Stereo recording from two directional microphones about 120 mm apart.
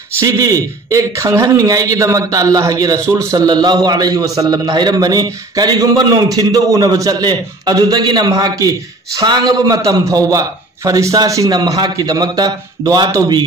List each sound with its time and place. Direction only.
0.1 s a man's voice: 25° right (ahead or behind)